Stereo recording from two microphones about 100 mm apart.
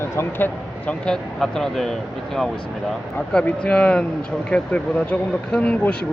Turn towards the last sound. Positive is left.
turn(degrees=10)  # may be behind; listen again after turning